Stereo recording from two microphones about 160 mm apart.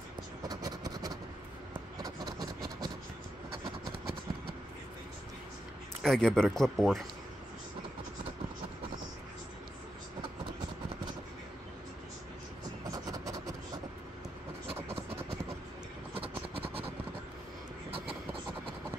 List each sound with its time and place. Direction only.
0.5 s vehicle: 25° right (ahead or behind)
3.9 s vehicle: 75° right (ahead or behind)
6.0 s speech: 5° left (ahead or behind)
12.9 s vehicle: 20° right (ahead or behind)
16.2 s vehicle: 35° right (ahead or behind)